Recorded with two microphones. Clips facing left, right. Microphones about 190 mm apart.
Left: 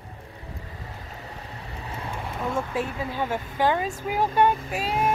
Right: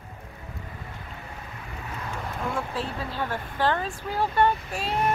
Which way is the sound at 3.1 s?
15° left (ahead or behind).